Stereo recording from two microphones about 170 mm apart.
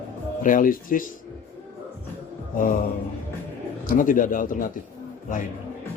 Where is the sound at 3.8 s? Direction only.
50° left (ahead or behind).